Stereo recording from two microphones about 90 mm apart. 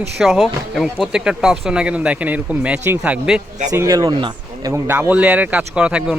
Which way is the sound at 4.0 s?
60° right (ahead or behind).